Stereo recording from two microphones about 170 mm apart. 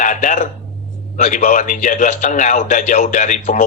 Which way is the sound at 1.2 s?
45° left (ahead or behind).